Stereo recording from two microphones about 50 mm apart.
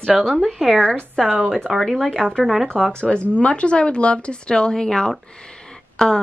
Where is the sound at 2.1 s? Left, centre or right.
Centre.